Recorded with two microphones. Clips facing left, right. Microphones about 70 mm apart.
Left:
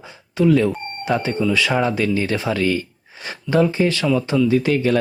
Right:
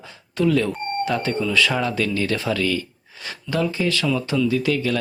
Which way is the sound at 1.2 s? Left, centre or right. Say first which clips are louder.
Left 1 dB; centre.